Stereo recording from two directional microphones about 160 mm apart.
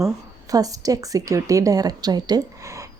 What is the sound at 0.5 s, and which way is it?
A woman's voice, 20° right (ahead or behind).